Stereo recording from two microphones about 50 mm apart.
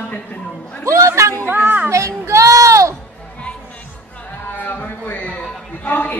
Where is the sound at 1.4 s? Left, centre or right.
Right.